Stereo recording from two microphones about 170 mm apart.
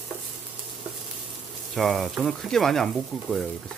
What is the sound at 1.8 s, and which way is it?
Speech, centre (ahead or behind).